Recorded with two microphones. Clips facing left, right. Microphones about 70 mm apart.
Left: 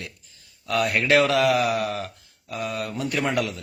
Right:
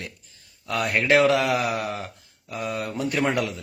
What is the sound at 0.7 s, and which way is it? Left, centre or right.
Speech, centre.